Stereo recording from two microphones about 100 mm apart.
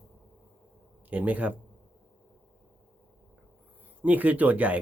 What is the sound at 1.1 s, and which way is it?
Speech, 15° right (ahead or behind).